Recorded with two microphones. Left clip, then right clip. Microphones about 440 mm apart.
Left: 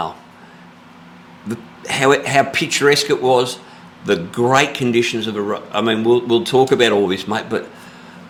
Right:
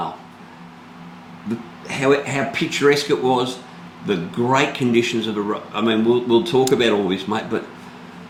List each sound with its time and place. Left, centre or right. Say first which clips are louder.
1.9 s speech: left 4 dB; left